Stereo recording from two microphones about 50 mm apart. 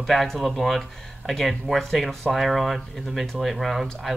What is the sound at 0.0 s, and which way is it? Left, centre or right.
Speech, centre.